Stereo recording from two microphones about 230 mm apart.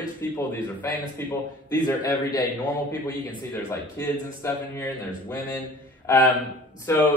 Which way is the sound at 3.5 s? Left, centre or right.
Centre.